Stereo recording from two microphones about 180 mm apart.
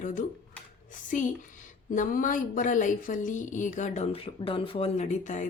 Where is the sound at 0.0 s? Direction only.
45° left (ahead or behind).